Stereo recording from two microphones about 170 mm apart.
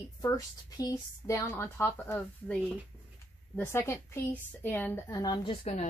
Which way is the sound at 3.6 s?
15° left (ahead or behind).